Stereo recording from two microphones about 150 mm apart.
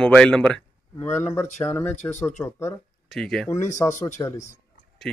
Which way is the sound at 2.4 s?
25° left (ahead or behind).